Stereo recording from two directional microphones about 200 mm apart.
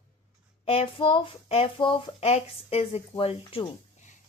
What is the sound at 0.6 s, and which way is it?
Speech, 30° left (ahead or behind).